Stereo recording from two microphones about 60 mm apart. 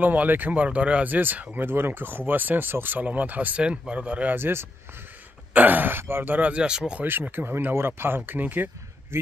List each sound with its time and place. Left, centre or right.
0.0 s speech: right
4.4 s speech: right
5.5 s speech: right
7.1 s speech: right
9.1 s speech: right